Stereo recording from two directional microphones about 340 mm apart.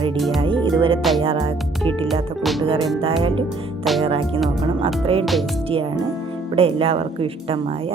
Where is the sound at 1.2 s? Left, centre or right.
Centre.